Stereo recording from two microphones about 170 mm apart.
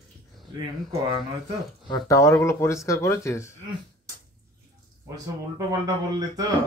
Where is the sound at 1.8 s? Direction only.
20° left (ahead or behind).